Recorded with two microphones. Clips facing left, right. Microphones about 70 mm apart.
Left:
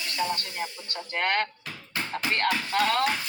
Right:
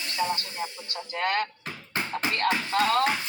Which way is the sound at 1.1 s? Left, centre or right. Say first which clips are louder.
Left 1 dB; left.